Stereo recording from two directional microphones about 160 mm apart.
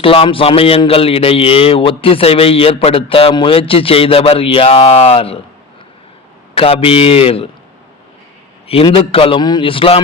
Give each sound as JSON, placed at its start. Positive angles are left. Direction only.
{"t": 0.0, "sound": "a man's voice", "side_deg": 35}
{"t": 6.5, "sound": "a man's voice", "side_deg": 35}
{"t": 8.6, "sound": "a man's voice", "side_deg": 35}